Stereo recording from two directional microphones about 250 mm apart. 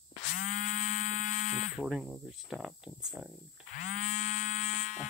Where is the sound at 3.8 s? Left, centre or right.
Left.